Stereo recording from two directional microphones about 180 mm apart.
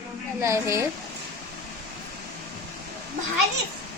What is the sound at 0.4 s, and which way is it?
Speech, 15° right (ahead or behind).